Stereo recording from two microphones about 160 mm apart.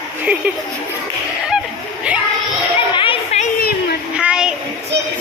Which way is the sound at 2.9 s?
35° left (ahead or behind).